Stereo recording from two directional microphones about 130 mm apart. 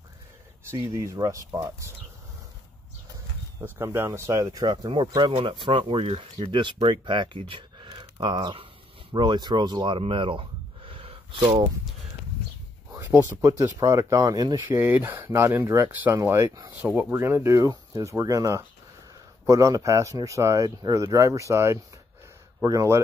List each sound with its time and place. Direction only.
0.7 s speech: 25° right (ahead or behind)
3.6 s speech: 20° right (ahead or behind); by 11.6 s 45° right (ahead or behind)
12.9 s speech: 25° right (ahead or behind)
14.7 s speech: 15° right (ahead or behind)
16.8 s speech: 10° right (ahead or behind)
17.1 s speech: 20° right (ahead or behind)